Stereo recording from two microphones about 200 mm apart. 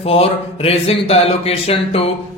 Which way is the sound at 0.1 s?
30° left (ahead or behind).